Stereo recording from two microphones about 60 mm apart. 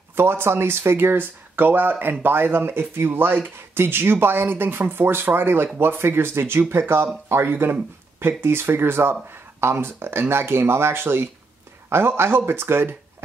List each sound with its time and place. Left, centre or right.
0.1 s speech: right